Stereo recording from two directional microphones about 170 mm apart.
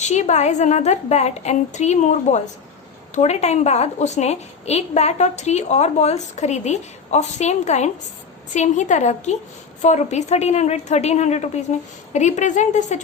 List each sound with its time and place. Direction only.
0.0 s a woman's voice: 45° left (ahead or behind)